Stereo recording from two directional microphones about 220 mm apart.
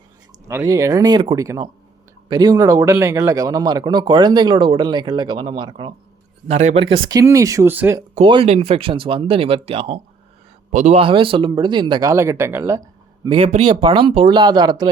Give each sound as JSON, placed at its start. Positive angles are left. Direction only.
{"t": 0.4, "sound": "speech", "side_deg": -15}
{"t": 8.1, "sound": "speech", "side_deg": -25}
{"t": 13.2, "sound": "speech", "side_deg": -25}